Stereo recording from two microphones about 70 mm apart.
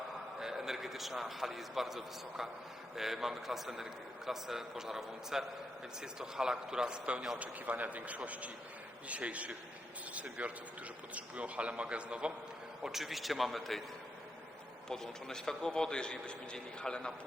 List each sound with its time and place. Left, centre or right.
0.3 s a man's voice: centre
12.8 s a man's voice: centre
14.8 s a man's voice: centre